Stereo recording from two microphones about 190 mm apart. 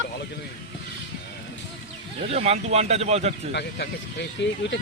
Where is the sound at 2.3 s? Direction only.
35° right (ahead or behind).